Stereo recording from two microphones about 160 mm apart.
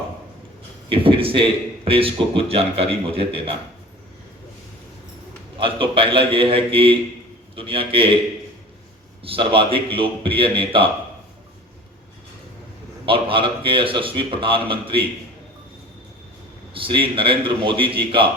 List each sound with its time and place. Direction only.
0.9 s a man's voice: 35° right (ahead or behind)
5.5 s a man's voice: 35° right (ahead or behind)
9.2 s a man's voice: 35° right (ahead or behind)
13.1 s a man's voice: 35° right (ahead or behind)
16.7 s a man's voice: 35° right (ahead or behind)